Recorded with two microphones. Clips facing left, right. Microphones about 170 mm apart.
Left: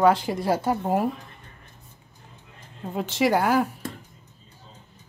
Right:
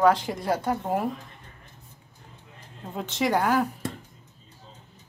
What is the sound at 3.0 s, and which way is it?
Speech, 10° left (ahead or behind).